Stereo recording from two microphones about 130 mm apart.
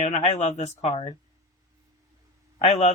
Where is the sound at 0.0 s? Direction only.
55° left (ahead or behind).